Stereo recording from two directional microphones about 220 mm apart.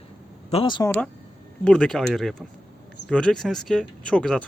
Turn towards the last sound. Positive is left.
turn(degrees=5)  # may be behind; listen again after turning